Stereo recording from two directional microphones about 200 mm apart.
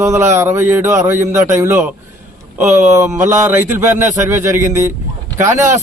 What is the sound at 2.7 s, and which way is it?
Speech, 40° right (ahead or behind).